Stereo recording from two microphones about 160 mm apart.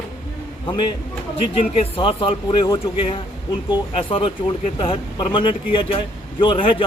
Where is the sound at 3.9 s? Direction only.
35° left (ahead or behind).